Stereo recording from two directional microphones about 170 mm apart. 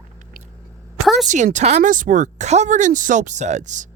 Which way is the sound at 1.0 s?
Centre (ahead or behind).